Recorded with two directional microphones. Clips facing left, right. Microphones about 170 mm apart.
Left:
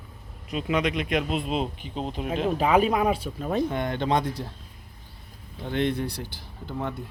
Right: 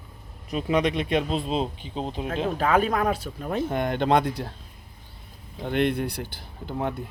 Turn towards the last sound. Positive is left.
turn(degrees=-55)  # may be behind; listen again after turning